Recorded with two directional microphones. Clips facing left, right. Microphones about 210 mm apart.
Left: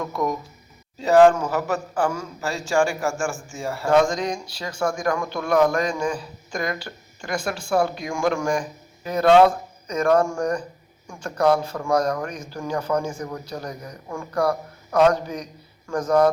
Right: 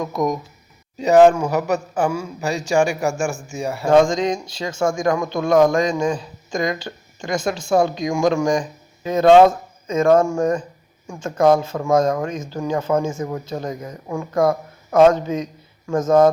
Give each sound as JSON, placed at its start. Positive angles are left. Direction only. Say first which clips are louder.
{"t": 0.0, "sound": "a man's voice", "louder": "right 4 dB", "side_deg": -15}